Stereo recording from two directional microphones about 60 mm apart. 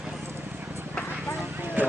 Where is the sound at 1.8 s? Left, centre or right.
Right.